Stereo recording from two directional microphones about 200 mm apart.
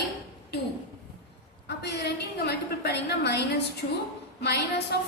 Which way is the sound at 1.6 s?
55° left (ahead or behind).